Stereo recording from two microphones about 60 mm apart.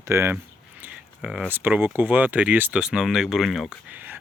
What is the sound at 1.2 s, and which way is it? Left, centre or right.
Speech, centre.